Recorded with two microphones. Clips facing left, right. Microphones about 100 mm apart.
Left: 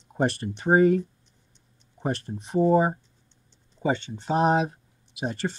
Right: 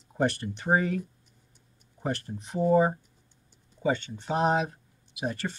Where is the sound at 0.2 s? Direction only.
30° left (ahead or behind).